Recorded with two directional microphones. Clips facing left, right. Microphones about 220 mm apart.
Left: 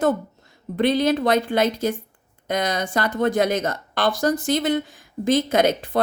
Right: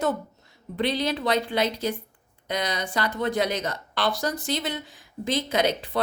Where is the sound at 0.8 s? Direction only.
50° left (ahead or behind).